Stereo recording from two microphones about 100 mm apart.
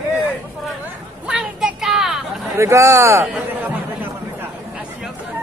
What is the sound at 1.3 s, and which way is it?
Child singing, 10° right (ahead or behind).